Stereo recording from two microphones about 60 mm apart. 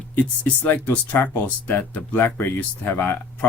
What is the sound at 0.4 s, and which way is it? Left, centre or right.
Speech, left.